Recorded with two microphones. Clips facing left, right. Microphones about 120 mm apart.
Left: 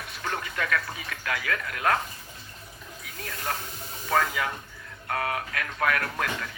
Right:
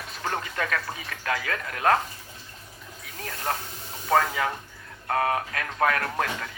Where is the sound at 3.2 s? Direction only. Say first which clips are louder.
Right 3 dB; 35° right (ahead or behind).